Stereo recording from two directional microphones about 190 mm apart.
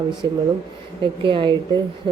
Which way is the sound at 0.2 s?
20° right (ahead or behind).